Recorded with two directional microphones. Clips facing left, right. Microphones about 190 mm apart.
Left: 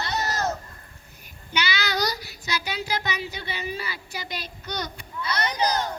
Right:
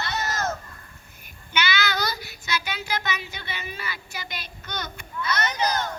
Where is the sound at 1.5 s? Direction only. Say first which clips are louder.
Right 1 dB; 35° left (ahead or behind).